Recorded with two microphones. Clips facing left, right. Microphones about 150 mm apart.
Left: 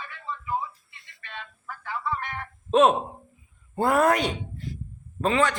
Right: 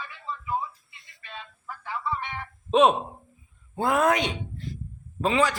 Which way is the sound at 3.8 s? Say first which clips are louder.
Left 2 dB; 5° left (ahead or behind).